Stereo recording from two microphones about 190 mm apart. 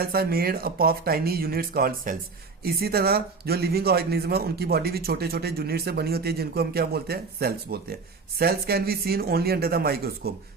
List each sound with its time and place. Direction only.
0.0 s speech: 55° right (ahead or behind)